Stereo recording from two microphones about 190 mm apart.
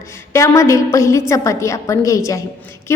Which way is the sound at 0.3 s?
15° left (ahead or behind).